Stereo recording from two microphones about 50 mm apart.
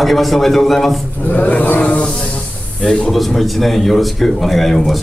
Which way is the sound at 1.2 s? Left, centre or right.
Left.